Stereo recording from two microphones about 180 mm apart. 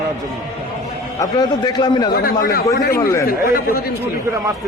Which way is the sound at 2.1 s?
55° left (ahead or behind).